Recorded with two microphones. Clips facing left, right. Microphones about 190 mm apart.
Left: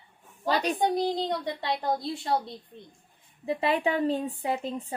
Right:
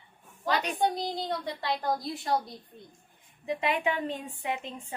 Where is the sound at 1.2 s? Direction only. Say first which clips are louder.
Left 2 dB; 20° left (ahead or behind).